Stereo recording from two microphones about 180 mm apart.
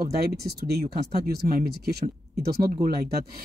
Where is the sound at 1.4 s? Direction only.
50° right (ahead or behind).